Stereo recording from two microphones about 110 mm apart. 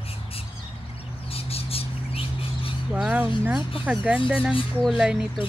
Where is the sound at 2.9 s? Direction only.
10° right (ahead or behind).